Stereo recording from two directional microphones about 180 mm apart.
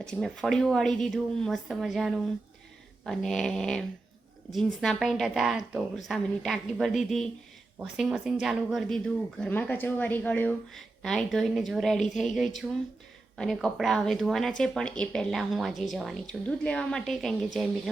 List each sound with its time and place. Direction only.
0.0 s speech: 5° left (ahead or behind)